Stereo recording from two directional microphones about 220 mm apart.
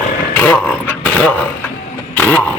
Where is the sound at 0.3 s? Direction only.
5° left (ahead or behind).